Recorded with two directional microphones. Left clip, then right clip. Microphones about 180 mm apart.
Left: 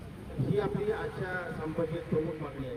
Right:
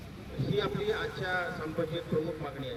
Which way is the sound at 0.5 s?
45° left (ahead or behind).